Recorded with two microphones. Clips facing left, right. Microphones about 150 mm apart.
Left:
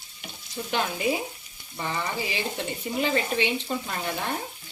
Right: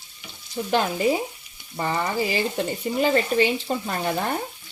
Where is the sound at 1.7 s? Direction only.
45° right (ahead or behind).